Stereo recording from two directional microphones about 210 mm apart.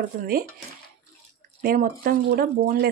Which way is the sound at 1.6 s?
40° right (ahead or behind).